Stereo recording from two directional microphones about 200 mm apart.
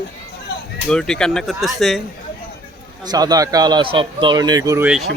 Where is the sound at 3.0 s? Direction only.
20° right (ahead or behind).